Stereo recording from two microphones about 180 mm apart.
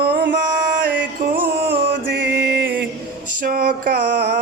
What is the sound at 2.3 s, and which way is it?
Music, 65° right (ahead or behind).